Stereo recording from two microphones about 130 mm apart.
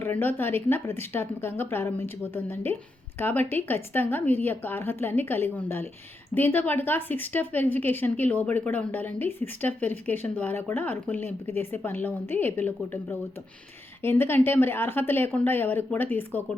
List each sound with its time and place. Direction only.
0.0 s a woman's voice: 15° left (ahead or behind)